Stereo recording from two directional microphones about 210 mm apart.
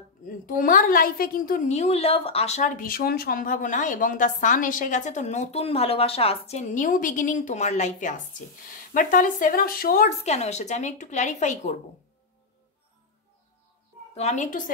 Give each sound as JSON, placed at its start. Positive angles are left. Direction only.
{"t": 0.2, "sound": "a woman's voice", "side_deg": 40}
{"t": 14.1, "sound": "a woman's voice", "side_deg": 35}